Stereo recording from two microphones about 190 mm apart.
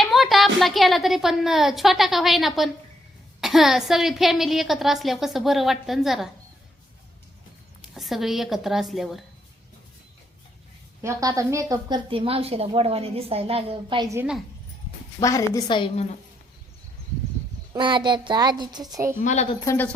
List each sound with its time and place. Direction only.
0.0 s a woman's voice: centre (ahead or behind)
7.8 s a woman's voice: centre (ahead or behind)
11.0 s a woman's voice: 20° right (ahead or behind)
14.2 s a woman's voice: 5° right (ahead or behind)
15.2 s a woman's voice: 15° left (ahead or behind)
15.6 s a woman's voice: 30° left (ahead or behind)
17.7 s a woman's voice: 25° right (ahead or behind)
19.2 s speech: 40° left (ahead or behind)
19.5 s a woman's voice: 15° left (ahead or behind)